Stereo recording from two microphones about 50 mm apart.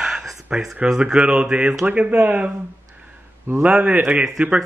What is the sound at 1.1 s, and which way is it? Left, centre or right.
A man's voice, centre.